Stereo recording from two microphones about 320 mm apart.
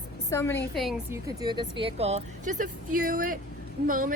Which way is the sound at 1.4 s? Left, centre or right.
Centre.